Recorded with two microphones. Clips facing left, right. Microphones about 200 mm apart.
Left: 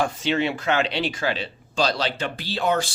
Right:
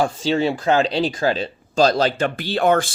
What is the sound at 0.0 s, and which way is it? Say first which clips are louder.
Speech: right 4 dB; 35° right (ahead or behind).